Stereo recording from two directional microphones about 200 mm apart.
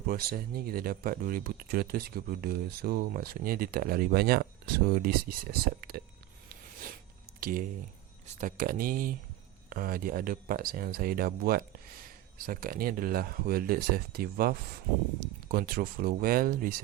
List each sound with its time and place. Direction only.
0.1 s speech: 50° right (ahead or behind)
7.3 s speech: 45° right (ahead or behind)